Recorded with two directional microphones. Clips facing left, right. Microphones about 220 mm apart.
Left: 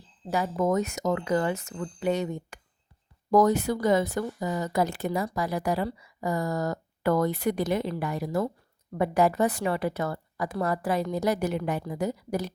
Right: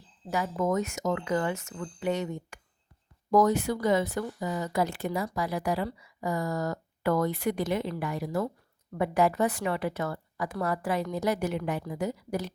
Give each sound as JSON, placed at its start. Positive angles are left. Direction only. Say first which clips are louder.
{"t": 0.3, "sound": "speech", "louder": "left 3 dB", "side_deg": 35}